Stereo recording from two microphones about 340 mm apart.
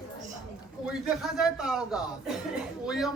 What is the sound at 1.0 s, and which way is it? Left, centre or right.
Speech, centre.